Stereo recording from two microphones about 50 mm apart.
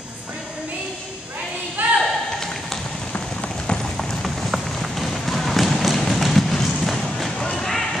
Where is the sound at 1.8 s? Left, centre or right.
Right.